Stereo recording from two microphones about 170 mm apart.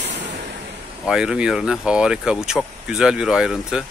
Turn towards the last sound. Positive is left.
turn(degrees=-5)  # may be behind; listen again after turning